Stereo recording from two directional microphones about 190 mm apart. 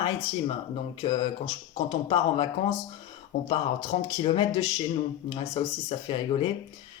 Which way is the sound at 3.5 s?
25° left (ahead or behind).